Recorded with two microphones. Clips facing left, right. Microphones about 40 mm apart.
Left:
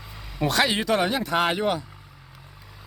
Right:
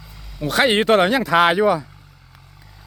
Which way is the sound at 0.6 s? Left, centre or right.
Right.